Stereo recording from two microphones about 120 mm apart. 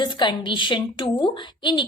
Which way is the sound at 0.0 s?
40° left (ahead or behind).